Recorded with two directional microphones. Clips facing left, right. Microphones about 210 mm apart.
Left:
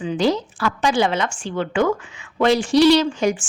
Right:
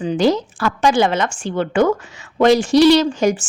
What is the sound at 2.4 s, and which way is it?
A woman's voice, 45° right (ahead or behind).